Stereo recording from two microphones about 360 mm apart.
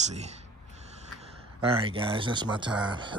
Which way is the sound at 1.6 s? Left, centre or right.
Centre.